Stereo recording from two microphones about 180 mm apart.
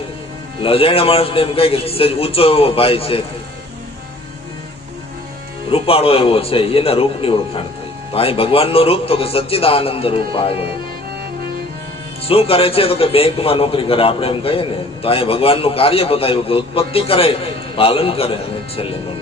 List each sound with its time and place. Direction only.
0.6 s a man's voice: 30° left (ahead or behind)
5.7 s a man's voice: 30° left (ahead or behind)
12.3 s a man's voice: 30° left (ahead or behind)